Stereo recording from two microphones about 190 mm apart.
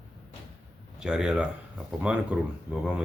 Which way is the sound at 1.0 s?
5° right (ahead or behind).